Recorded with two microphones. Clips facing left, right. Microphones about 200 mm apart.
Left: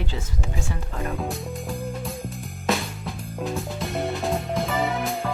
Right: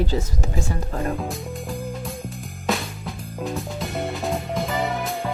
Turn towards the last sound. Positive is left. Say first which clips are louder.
# even
turn(degrees=0)  # may be behind; listen again after turning